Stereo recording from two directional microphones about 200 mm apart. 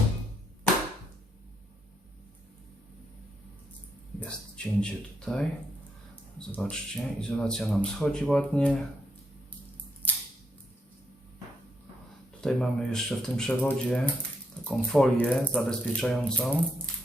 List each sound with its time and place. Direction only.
4.2 s speech: 5° left (ahead or behind)
6.6 s speech: 5° left (ahead or behind)
12.4 s speech: 5° left (ahead or behind)